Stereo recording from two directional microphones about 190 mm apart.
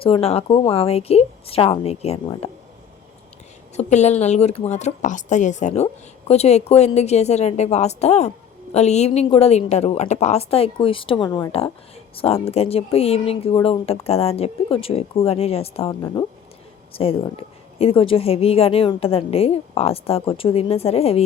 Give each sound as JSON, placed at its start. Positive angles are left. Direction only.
{"t": 0.0, "sound": "a woman's voice", "side_deg": 30}
{"t": 3.8, "sound": "a woman's voice", "side_deg": 35}